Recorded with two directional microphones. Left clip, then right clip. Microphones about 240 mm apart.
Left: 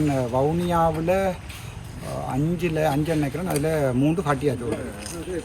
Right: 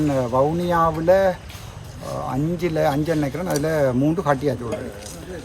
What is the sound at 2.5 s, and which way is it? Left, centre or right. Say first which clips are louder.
Speech: right 3 dB; centre.